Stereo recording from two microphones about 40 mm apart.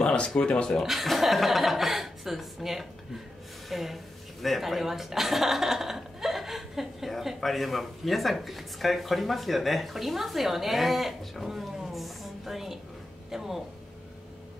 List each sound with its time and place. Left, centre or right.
0.0 s a sound: left
0.4 s speech: left
0.8 s speech: centre